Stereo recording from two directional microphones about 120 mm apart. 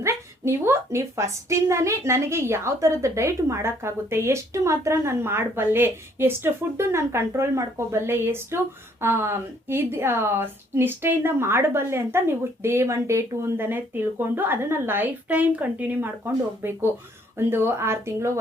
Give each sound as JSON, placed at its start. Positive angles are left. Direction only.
{"t": 0.0, "sound": "a woman's voice", "side_deg": -20}